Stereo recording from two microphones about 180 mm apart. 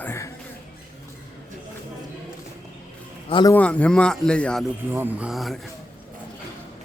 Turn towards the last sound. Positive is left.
turn(degrees=0)  # may be behind; listen again after turning